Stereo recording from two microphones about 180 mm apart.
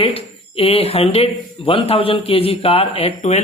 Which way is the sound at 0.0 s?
30° left (ahead or behind).